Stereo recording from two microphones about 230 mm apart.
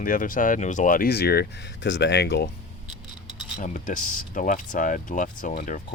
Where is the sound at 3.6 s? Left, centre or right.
Left.